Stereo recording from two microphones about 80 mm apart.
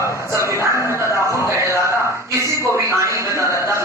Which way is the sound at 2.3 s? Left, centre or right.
Right.